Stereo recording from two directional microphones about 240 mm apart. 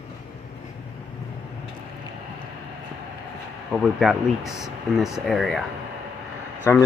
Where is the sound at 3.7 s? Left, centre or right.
Centre.